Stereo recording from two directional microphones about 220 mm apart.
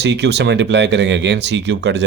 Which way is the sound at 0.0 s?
50° right (ahead or behind).